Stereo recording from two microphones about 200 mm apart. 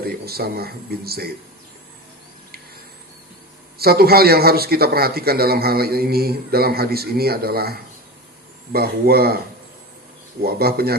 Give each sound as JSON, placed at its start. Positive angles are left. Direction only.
{"t": 0.0, "sound": "speech", "side_deg": -50}
{"t": 3.8, "sound": "speech", "side_deg": -50}
{"t": 10.4, "sound": "speech", "side_deg": -50}